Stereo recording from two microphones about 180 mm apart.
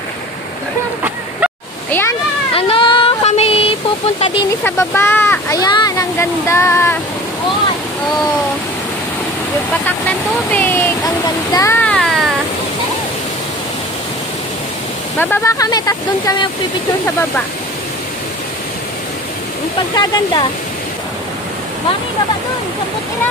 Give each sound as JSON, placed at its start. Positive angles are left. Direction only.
{"t": 1.9, "sound": "a sound", "side_deg": 10}
{"t": 2.5, "sound": "child singing", "side_deg": 30}
{"t": 4.6, "sound": "speech", "side_deg": 15}
{"t": 9.8, "sound": "speech", "side_deg": 10}
{"t": 11.8, "sound": "a sound", "side_deg": 5}
{"t": 15.1, "sound": "speech", "side_deg": 10}
{"t": 20.0, "sound": "speech", "side_deg": 25}